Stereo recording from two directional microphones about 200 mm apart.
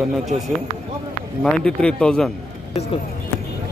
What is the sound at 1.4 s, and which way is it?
Speech, 5° left (ahead or behind).